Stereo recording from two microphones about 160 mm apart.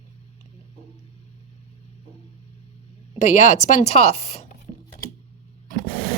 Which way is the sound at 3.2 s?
45° left (ahead or behind).